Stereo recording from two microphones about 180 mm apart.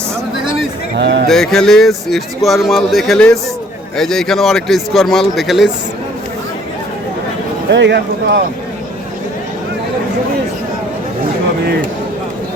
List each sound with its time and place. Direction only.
0.9 s speech: 70° right (ahead or behind)
1.3 s speech: centre (ahead or behind)
7.7 s speech: 70° right (ahead or behind)